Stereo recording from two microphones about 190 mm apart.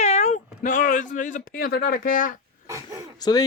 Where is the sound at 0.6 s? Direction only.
45° left (ahead or behind).